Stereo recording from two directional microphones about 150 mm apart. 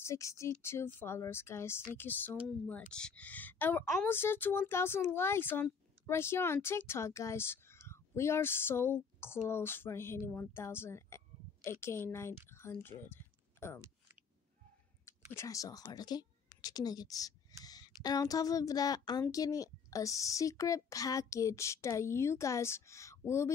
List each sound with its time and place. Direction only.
0.0 s speech: 20° left (ahead or behind)
13.0 s a sound: 15° left (ahead or behind)
15.3 s speech: 20° left (ahead or behind)